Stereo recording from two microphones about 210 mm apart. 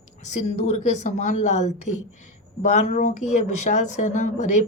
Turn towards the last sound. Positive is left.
turn(degrees=35)  # may be behind; listen again after turning